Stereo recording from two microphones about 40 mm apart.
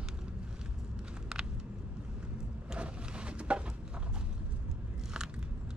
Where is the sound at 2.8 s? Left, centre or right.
Right.